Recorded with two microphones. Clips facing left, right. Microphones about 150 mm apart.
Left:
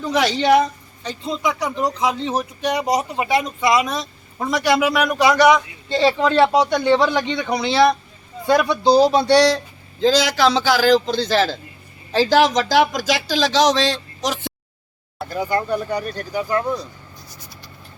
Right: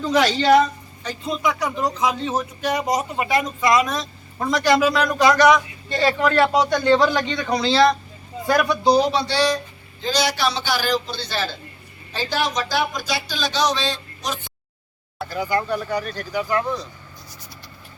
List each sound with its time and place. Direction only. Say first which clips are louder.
0.0 s speech: even; 15° left (ahead or behind)
5.9 s speech: left 2 dB; 25° left (ahead or behind)
8.4 s speech: left 2 dB; 25° left (ahead or behind)
9.1 s a sound: left 6 dB; 65° left (ahead or behind)
10.0 s speech: left 6 dB; 90° left
15.3 s speech: left 2 dB; 25° left (ahead or behind)